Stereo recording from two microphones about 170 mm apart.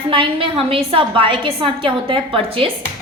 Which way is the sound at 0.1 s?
30° right (ahead or behind).